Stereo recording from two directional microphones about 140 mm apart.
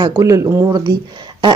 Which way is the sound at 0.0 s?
25° right (ahead or behind).